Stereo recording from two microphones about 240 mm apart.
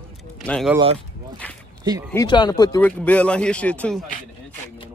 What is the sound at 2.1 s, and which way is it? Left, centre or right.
Speech, centre.